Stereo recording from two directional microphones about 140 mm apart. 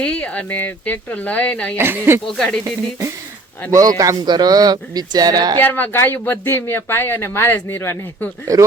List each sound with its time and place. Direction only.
0.0 s speech: 10° left (ahead or behind)
1.8 s speech: 15° right (ahead or behind)
2.2 s speech: 5° left (ahead or behind)
3.7 s speech: 25° right (ahead or behind)
5.5 s speech: 15° left (ahead or behind)
8.5 s speech: 25° right (ahead or behind)